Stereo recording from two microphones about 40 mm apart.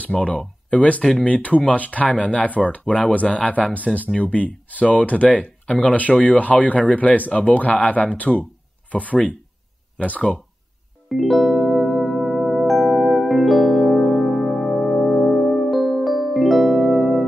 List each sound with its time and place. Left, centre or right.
0.1 s speech: centre
0.7 s speech: left
11.1 s music: centre